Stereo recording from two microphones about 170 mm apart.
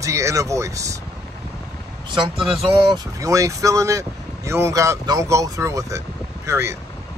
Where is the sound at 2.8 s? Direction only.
20° right (ahead or behind).